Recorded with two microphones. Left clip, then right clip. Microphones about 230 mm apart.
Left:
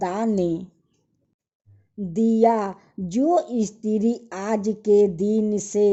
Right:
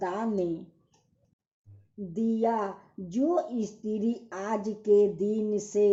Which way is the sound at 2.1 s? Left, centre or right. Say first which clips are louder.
Left 9 dB; left.